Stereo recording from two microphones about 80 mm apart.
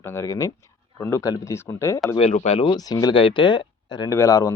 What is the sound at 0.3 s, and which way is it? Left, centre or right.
Speech, left.